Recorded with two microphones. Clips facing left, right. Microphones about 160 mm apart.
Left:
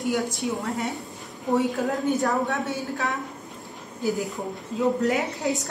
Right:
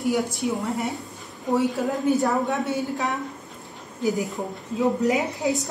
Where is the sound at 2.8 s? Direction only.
20° right (ahead or behind).